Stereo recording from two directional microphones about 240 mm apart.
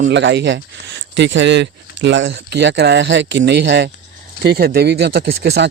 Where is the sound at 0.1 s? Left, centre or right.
Right.